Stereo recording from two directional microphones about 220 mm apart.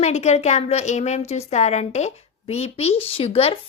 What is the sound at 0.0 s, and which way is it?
Speech, 30° left (ahead or behind).